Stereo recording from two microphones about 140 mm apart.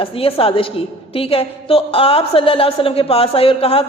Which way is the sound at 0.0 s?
40° left (ahead or behind).